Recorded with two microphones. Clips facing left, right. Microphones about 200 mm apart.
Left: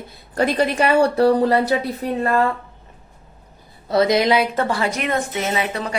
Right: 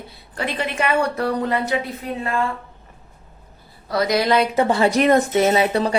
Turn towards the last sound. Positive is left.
turn(degrees=-35)  # may be behind; listen again after turning